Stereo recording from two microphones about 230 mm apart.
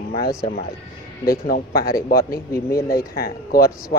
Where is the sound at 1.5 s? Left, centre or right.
Left.